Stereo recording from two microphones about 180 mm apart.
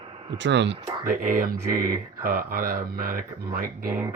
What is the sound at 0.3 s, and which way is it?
Speech, 80° right.